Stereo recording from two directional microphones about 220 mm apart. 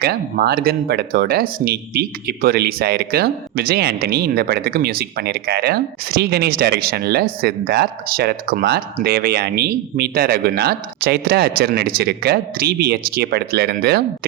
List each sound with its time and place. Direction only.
0.0 s speech: 45° right (ahead or behind)